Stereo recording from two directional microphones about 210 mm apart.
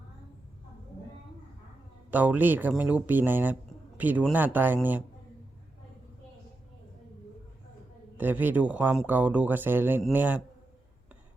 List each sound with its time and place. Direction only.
2.0 s speech: 10° right (ahead or behind)
8.1 s speech: 10° right (ahead or behind)